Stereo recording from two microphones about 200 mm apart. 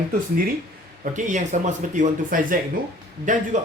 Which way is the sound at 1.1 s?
40° right (ahead or behind).